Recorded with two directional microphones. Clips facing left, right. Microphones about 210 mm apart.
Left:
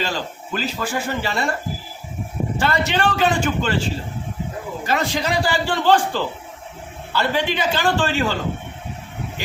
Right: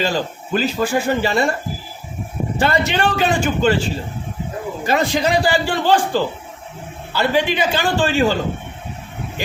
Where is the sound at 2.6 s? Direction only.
15° right (ahead or behind).